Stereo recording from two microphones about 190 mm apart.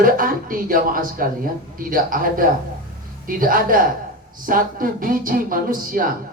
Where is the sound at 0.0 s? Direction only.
45° right (ahead or behind).